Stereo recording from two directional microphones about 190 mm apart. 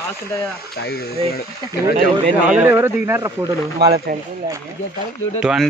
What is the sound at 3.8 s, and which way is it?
Speech, 60° right (ahead or behind).